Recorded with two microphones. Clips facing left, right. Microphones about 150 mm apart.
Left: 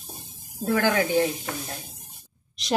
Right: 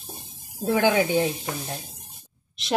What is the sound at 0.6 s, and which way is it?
Speech, 20° right (ahead or behind).